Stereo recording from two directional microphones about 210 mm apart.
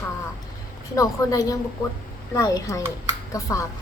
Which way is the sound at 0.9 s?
15° left (ahead or behind).